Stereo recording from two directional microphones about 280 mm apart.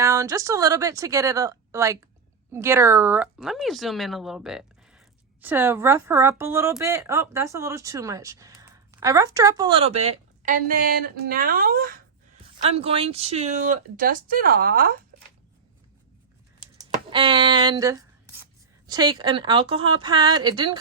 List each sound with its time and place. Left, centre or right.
0.0 s speech: centre; by 12.0 s right
12.7 s speech: centre
17.1 s speech: centre